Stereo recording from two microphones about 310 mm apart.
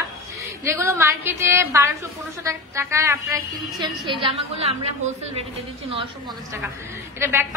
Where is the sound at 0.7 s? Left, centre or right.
Centre.